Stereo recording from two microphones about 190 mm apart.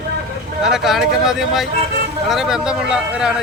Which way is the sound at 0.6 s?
Centre (ahead or behind).